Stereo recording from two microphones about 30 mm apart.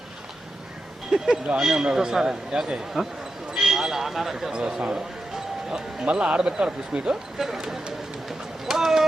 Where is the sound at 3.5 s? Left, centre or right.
Centre.